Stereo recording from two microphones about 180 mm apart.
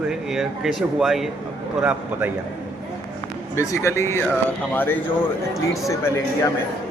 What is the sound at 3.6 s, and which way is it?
A man's voice, 15° left (ahead or behind).